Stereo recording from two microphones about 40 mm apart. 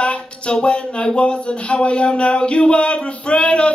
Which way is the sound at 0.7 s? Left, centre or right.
Left.